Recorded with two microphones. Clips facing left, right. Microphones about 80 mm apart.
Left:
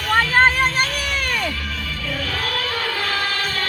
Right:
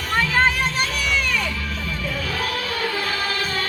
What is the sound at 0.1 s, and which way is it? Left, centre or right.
Music, left.